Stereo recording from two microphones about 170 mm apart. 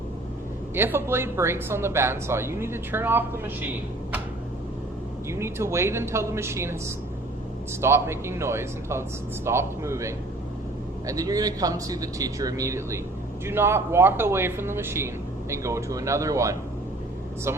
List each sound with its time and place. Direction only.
0.8 s speech: 15° right (ahead or behind)
5.3 s speech: 15° right (ahead or behind)
7.8 s a man's voice: 15° right (ahead or behind)